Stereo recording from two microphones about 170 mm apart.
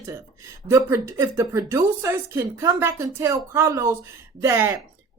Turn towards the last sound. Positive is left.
turn(degrees=-15)  # may be behind; listen again after turning